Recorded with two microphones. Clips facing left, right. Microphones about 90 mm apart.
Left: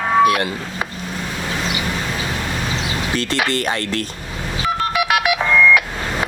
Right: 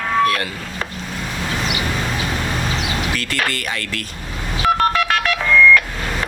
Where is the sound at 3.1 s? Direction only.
25° left (ahead or behind).